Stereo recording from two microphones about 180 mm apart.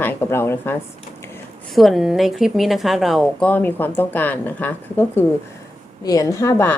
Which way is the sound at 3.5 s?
10° left (ahead or behind).